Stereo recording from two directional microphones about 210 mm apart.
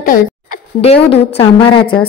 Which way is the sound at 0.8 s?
30° left (ahead or behind).